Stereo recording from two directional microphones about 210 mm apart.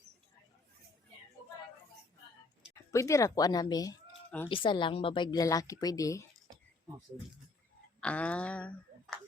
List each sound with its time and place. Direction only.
2.9 s a woman's voice: 15° left (ahead or behind)
8.0 s speech: 5° left (ahead or behind)